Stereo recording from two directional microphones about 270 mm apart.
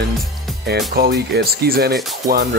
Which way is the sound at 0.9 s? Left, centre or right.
Right.